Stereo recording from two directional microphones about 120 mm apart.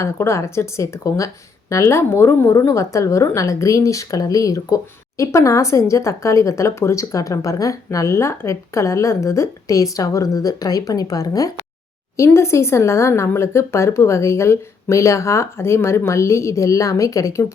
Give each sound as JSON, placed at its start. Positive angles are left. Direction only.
{"t": 0.0, "sound": "a woman's voice", "side_deg": 25}